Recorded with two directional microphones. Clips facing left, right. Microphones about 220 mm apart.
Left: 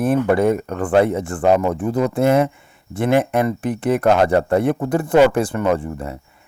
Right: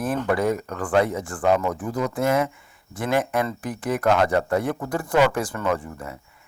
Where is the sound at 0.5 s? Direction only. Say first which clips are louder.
Left 5 dB; 25° left (ahead or behind).